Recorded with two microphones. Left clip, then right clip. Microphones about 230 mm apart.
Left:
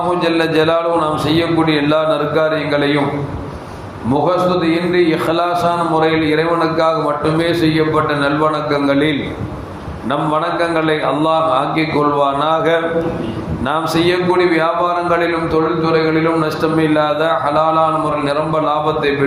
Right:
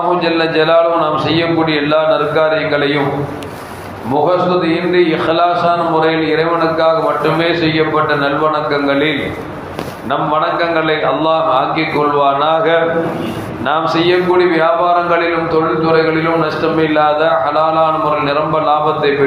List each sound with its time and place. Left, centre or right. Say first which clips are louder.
0.3 s a man's voice: even; left
4.3 s a man's voice: right 1 dB; left
10.6 s a man's voice: right 2 dB; left
15.8 s a man's voice: right 2 dB; left